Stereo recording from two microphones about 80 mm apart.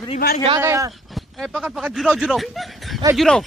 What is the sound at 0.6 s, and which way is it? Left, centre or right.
Speech, right.